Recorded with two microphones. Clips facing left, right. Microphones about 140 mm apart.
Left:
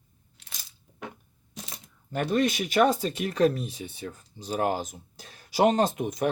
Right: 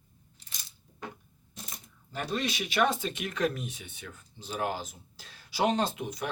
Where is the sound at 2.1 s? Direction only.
50° left (ahead or behind).